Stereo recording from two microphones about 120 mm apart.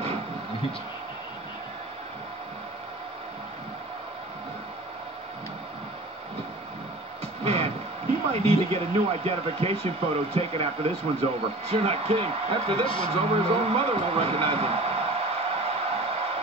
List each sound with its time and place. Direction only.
7.4 s a sound: 55° right (ahead or behind)
8.3 s speech: 55° right (ahead or behind)
12.8 s a man's voice: 45° left (ahead or behind)
13.1 s a man's voice: 55° right (ahead or behind)